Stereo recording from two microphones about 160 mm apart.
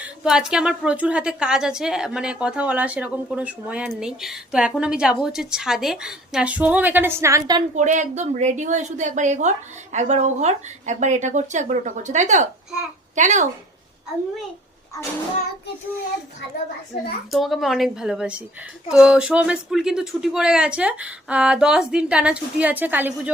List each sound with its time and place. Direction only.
0.0 s a woman's voice: 5° right (ahead or behind); by 7.6 s 20° right (ahead or behind)
7.8 s a woman's voice: 50° right (ahead or behind)
17.3 s a woman's voice: centre (ahead or behind)